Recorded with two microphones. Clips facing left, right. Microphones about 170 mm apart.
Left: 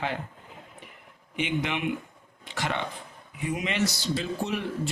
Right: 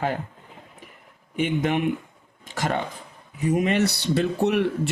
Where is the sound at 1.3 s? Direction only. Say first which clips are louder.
Right 6 dB; 45° right (ahead or behind); by 4.9 s 65° right (ahead or behind).